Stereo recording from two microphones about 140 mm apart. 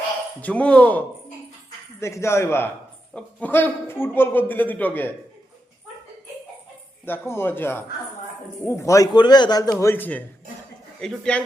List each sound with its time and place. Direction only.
0.4 s a man's voice: 10° left (ahead or behind)
7.0 s a man's voice: 15° left (ahead or behind)
9.8 s a man's voice: 15° left (ahead or behind)